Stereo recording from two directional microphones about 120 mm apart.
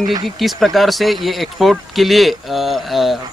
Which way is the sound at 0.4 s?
Centre (ahead or behind).